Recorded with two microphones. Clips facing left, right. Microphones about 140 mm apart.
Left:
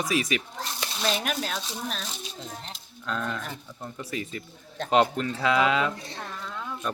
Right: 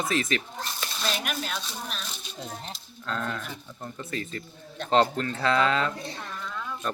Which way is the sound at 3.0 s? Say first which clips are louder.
Left 1 dB; 5° left (ahead or behind).